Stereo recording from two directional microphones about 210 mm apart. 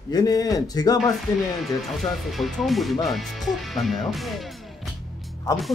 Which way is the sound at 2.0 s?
Centre (ahead or behind).